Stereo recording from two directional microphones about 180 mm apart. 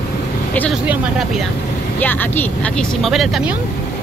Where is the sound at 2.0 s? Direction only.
10° left (ahead or behind).